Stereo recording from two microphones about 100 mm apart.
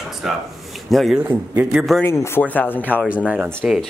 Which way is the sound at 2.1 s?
25° left (ahead or behind).